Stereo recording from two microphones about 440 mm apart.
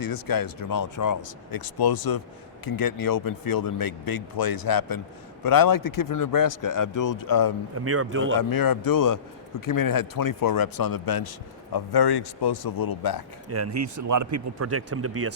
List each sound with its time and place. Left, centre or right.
0.0 s speech: left
7.9 s a man's voice: right
8.4 s speech: left
13.5 s speech: right